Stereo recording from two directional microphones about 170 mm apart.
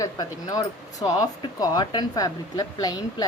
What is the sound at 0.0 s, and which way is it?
Speech, 20° left (ahead or behind).